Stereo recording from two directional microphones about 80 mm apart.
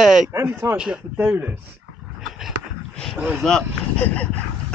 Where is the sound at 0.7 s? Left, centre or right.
Centre.